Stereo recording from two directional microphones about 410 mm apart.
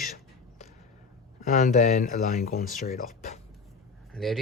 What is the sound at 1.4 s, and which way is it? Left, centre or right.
Speech, centre.